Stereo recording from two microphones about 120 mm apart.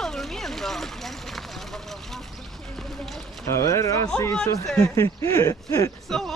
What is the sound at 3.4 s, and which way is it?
Speech, 25° left (ahead or behind).